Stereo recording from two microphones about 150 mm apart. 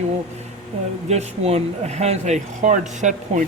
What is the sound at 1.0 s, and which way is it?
Speech, 45° right (ahead or behind).